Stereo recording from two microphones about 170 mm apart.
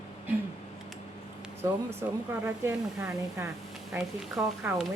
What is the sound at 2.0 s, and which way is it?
A woman's voice, 15° right (ahead or behind).